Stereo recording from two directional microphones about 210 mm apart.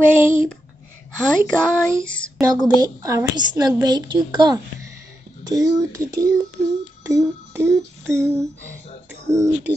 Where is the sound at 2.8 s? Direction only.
15° right (ahead or behind).